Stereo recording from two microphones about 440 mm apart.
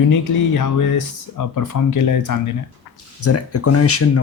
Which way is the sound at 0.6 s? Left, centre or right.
Left.